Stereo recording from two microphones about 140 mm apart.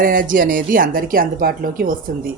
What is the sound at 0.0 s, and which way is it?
Speech, 75° right (ahead or behind).